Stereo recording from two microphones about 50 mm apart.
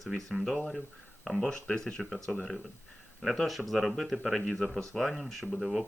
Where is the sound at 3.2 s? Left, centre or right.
Centre.